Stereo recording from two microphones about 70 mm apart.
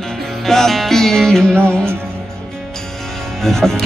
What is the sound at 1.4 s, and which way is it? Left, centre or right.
Music, right.